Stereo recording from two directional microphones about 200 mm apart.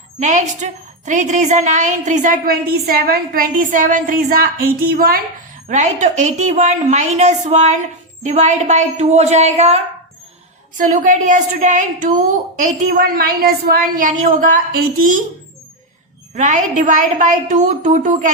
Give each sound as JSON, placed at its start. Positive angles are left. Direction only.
{"t": 0.2, "sound": "a woman's voice", "side_deg": -35}
{"t": 5.6, "sound": "a woman's voice", "side_deg": -35}
{"t": 16.3, "sound": "a woman's voice", "side_deg": -35}